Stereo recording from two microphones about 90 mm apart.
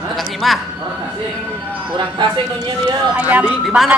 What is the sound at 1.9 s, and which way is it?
Speech, 60° right (ahead or behind).